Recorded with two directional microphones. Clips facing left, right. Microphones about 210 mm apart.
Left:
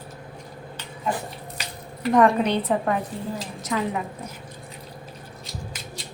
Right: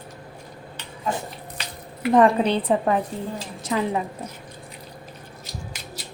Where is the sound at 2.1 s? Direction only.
30° right (ahead or behind).